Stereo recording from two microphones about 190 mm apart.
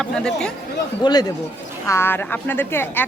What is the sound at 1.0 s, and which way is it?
A man's voice, 20° left (ahead or behind).